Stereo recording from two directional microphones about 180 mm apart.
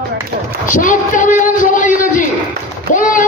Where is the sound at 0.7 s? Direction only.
45° left (ahead or behind).